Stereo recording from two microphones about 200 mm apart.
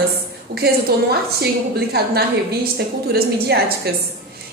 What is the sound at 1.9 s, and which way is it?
A woman's voice, 50° right (ahead or behind).